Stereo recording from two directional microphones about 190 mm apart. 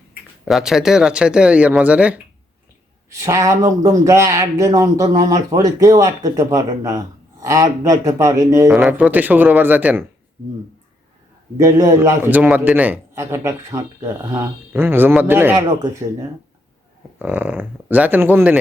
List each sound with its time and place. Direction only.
0.4 s speech: centre (ahead or behind)
11.5 s speech: 15° right (ahead or behind)
17.2 s speech: 10° right (ahead or behind)